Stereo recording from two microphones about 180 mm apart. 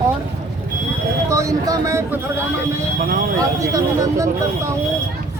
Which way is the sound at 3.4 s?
20° right (ahead or behind).